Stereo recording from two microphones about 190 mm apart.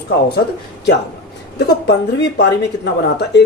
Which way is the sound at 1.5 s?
65° left (ahead or behind).